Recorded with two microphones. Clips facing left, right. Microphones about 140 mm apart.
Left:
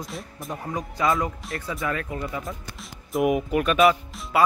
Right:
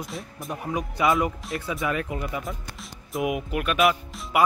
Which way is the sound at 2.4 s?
Centre (ahead or behind).